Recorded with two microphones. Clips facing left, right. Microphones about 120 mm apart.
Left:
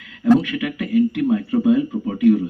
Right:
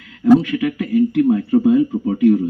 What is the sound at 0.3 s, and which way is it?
Speech, 35° right (ahead or behind).